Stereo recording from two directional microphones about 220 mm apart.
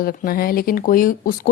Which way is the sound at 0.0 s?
40° left (ahead or behind).